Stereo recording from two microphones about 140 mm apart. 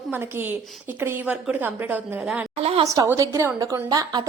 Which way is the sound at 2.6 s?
45° right (ahead or behind).